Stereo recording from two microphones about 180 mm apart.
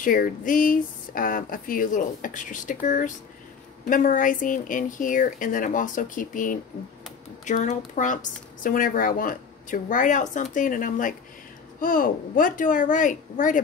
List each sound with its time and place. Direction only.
0.0 s speech: 50° left (ahead or behind)